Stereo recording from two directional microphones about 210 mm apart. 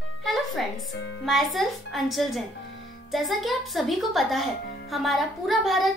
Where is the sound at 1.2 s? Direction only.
Centre (ahead or behind).